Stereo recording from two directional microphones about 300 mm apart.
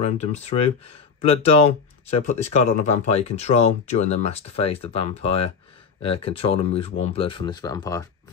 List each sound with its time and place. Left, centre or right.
0.0 s speech: left